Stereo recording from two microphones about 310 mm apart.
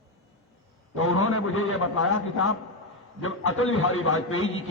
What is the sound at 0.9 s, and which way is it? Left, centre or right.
A man's voice, left.